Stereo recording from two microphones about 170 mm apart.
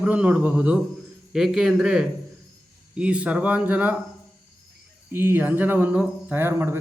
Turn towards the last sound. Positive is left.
turn(degrees=-10)  # may be behind; listen again after turning